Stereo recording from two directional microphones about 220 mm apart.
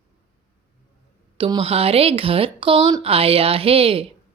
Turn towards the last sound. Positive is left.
turn(degrees=-25)  # may be behind; listen again after turning